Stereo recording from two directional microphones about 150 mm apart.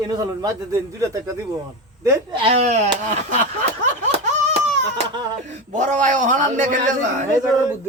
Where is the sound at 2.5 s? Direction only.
50° right (ahead or behind).